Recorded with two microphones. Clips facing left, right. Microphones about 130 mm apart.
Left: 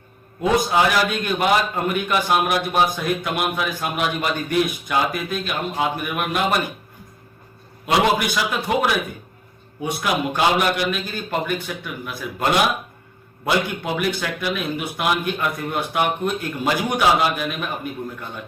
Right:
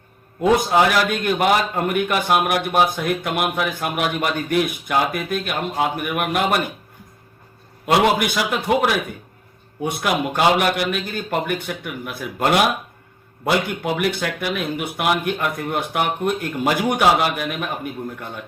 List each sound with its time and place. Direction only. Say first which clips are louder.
0.7 s a man's voice: right 2 dB; 55° right (ahead or behind)
7.9 s a man's voice: right 2 dB; 55° right (ahead or behind)